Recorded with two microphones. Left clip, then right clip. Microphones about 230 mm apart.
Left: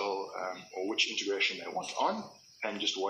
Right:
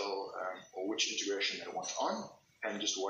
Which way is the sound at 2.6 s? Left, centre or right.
Centre.